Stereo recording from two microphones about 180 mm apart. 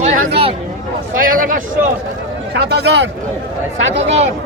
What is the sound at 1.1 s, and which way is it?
Speech, 50° right (ahead or behind).